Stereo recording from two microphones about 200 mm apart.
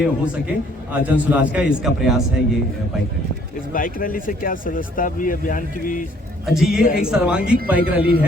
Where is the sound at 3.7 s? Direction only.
45° left (ahead or behind).